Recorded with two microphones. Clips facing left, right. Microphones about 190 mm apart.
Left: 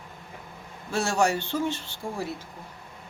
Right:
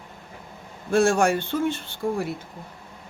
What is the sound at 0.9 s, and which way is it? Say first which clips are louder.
Speech: right 5 dB; 55° right (ahead or behind).